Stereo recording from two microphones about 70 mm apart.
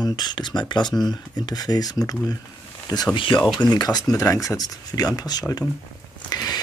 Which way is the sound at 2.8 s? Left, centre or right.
Left.